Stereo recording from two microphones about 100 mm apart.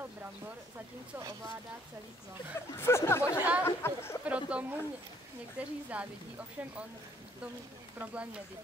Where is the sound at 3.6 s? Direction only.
25° left (ahead or behind).